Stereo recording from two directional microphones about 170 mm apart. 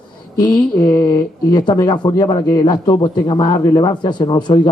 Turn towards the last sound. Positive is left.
turn(degrees=25)  # may be behind; listen again after turning